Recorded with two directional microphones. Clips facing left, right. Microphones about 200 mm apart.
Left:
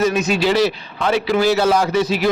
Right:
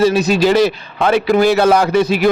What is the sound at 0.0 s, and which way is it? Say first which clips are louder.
A man's voice: right 5 dB; 35° right (ahead or behind).